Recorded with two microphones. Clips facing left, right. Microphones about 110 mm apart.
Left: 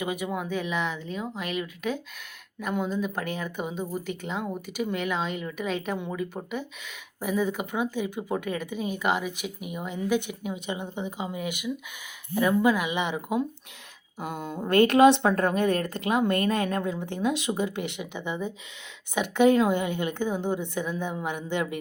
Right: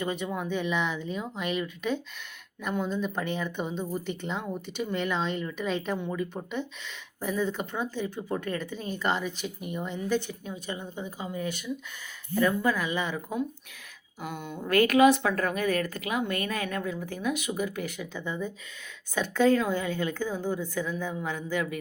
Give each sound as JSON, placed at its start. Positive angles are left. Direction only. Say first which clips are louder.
{"t": 0.0, "sound": "a woman's voice", "louder": "left 1 dB", "side_deg": 10}
{"t": 14.2, "sound": "a woman's voice", "louder": "left 3 dB", "side_deg": 35}